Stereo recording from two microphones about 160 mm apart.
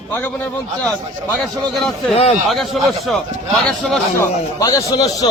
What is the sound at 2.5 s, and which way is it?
A man's voice, centre (ahead or behind).